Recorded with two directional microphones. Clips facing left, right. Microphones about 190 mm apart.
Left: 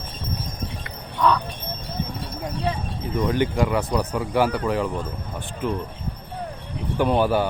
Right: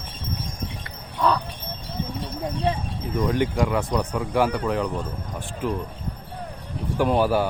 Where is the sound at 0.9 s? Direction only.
35° right (ahead or behind).